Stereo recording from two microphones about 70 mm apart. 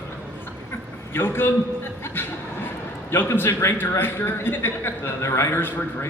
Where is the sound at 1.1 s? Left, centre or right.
Left.